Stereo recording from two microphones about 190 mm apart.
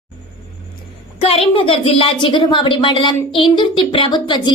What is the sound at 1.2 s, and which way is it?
Speech, 30° left (ahead or behind).